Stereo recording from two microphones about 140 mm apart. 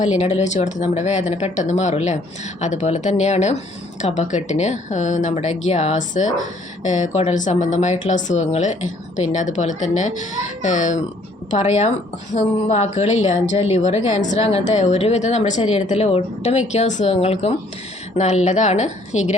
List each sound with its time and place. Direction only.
0.0 s a woman's voice: 55° left (ahead or behind)